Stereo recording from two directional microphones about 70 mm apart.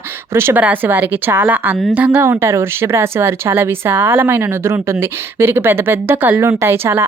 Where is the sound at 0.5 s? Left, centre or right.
Right.